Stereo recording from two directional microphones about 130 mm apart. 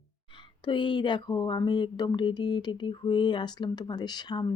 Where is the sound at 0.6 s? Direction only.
35° left (ahead or behind).